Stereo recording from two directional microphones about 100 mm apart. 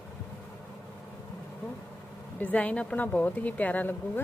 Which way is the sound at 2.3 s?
15° left (ahead or behind).